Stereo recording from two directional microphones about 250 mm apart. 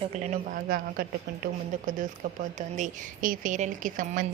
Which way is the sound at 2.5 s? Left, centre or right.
Right.